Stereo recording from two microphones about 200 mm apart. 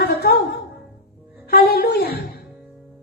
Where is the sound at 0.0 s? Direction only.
55° left (ahead or behind).